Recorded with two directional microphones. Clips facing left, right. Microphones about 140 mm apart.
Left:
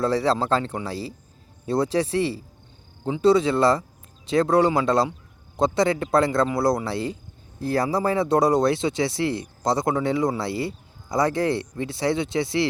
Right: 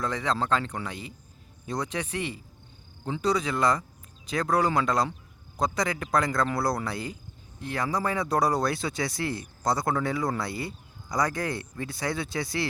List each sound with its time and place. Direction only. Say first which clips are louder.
0.0 s speech: left 7 dB; 35° left (ahead or behind)